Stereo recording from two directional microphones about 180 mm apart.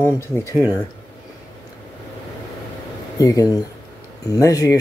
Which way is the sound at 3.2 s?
20° left (ahead or behind).